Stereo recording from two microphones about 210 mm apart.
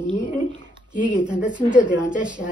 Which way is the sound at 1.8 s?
5° right (ahead or behind).